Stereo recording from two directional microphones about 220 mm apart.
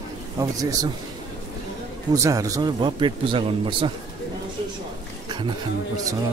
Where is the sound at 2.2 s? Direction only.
15° right (ahead or behind).